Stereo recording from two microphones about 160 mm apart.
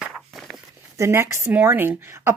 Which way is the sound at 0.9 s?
15° right (ahead or behind).